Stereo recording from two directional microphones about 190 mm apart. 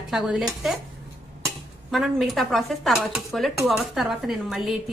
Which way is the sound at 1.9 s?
Centre (ahead or behind).